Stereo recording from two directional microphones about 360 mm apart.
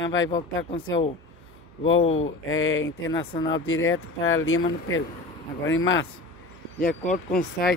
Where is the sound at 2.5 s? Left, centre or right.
Left.